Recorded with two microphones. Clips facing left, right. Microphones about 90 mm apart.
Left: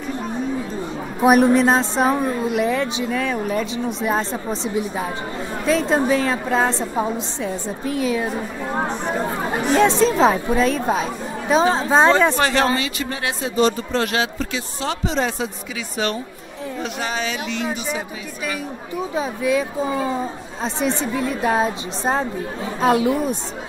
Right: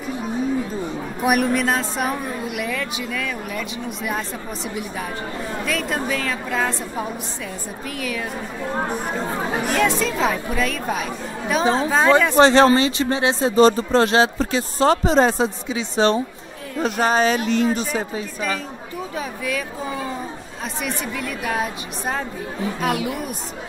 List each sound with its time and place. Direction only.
1.2 s a woman's voice: 25° left (ahead or behind)
9.1 s speech: 10° left (ahead or behind)
9.7 s a woman's voice: 25° left (ahead or behind)
12.4 s speech: 30° right (ahead or behind)
16.8 s speech: 40° right (ahead or behind)
18.9 s a woman's voice: 20° left (ahead or behind)